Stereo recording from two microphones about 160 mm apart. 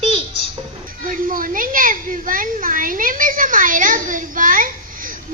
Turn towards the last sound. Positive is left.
turn(degrees=-60)  # may be behind; listen again after turning